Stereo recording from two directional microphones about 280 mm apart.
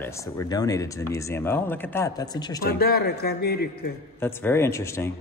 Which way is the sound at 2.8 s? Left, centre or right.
Left.